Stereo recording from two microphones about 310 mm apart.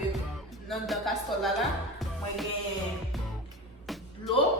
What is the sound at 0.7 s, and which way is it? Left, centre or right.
Speech, centre.